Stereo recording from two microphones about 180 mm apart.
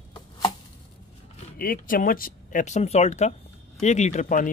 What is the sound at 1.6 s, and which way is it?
Speech, 50° left (ahead or behind).